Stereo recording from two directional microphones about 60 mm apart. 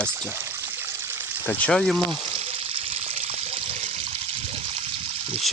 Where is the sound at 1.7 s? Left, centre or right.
Centre.